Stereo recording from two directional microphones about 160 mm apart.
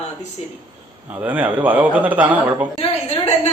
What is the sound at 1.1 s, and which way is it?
A man's voice, 10° right (ahead or behind).